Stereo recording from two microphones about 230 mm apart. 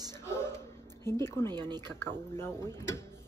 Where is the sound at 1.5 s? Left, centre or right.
Centre.